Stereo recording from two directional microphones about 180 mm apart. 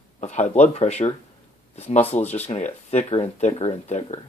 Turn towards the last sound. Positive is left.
turn(degrees=40)  # may be behind; listen again after turning